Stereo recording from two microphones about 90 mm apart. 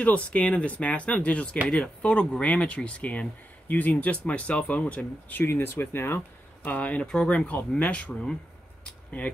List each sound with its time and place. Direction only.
0.0 s speech: 15° left (ahead or behind)
5.4 s speech: 25° left (ahead or behind); by 8.4 s 10° left (ahead or behind)